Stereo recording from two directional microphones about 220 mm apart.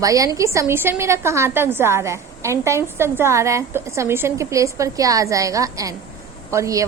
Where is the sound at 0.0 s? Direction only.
15° right (ahead or behind).